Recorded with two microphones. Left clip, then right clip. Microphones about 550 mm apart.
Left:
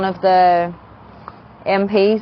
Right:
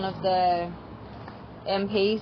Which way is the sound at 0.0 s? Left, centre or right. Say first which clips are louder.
Left 11 dB; left.